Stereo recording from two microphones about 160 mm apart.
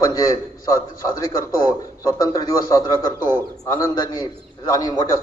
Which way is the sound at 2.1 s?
20° left (ahead or behind).